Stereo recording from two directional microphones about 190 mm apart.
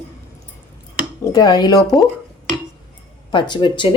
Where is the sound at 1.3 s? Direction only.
20° left (ahead or behind).